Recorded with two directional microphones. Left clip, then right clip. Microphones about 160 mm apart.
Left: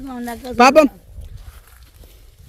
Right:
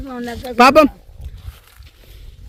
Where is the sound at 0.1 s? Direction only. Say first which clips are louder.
Right 2 dB; 70° left (ahead or behind).